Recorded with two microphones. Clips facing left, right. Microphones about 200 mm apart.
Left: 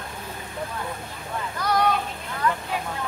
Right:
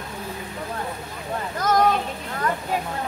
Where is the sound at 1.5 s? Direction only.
45° right (ahead or behind).